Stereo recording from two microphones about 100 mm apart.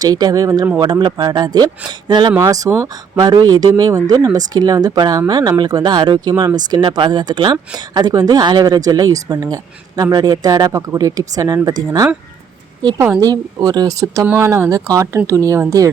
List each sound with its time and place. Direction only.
0.0 s speech: 40° right (ahead or behind)
2.4 s speech: 35° right (ahead or behind)
13.1 s speech: 40° right (ahead or behind)
14.3 s speech: 20° right (ahead or behind)